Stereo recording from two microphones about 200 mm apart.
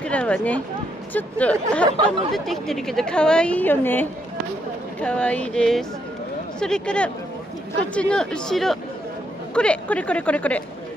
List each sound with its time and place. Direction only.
0.0 s a woman's voice: 5° left (ahead or behind)